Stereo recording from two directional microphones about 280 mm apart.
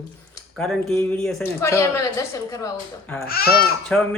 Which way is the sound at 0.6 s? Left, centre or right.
Centre.